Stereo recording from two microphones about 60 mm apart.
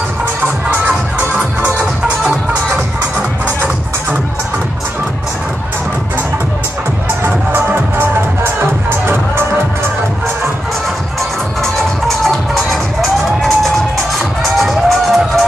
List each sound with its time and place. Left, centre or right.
7.2 s music: right
13.4 s music: centre